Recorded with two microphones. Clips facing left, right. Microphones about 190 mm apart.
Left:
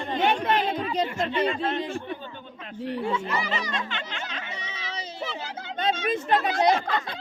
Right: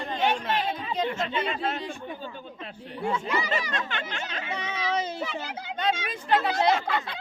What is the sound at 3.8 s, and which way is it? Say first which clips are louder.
Speech: right 1 dB; 50° right (ahead or behind).